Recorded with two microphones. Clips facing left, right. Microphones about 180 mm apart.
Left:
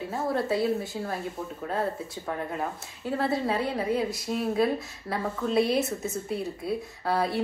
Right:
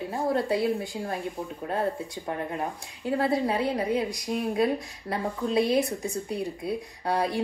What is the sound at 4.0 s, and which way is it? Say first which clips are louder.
Speech: even; 15° right (ahead or behind).